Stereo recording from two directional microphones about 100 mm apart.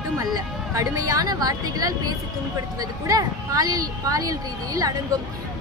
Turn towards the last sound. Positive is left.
turn(degrees=-35)  # may be behind; listen again after turning